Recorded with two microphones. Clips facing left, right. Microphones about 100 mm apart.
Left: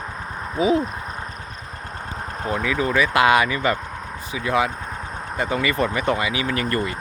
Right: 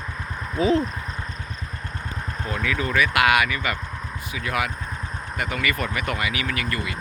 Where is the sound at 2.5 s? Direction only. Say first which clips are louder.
Left 4 dB; 20° left (ahead or behind).